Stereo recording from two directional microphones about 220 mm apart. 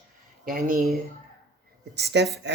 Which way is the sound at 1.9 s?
50° right (ahead or behind).